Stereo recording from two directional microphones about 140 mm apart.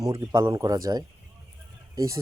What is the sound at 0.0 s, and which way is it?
Speech, 20° right (ahead or behind).